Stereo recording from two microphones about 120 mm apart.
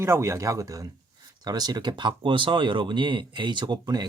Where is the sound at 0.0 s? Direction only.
20° right (ahead or behind).